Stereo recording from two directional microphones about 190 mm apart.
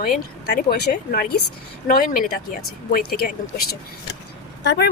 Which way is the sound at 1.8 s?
45° left (ahead or behind).